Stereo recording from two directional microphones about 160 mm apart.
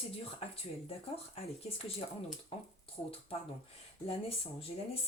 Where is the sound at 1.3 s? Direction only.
35° left (ahead or behind).